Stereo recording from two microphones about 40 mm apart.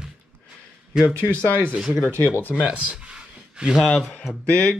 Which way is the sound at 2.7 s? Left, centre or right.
Right.